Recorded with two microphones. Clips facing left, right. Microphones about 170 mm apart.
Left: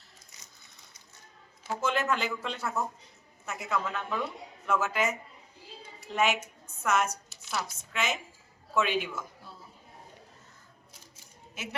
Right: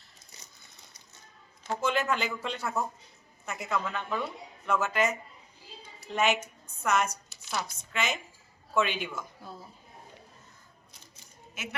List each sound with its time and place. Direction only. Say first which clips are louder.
1.6 s speech: right 1 dB; 5° left (ahead or behind)
6.1 s a woman's voice: right 1 dB; 5° left (ahead or behind)
11.5 s a woman's voice: left 1 dB; 35° left (ahead or behind)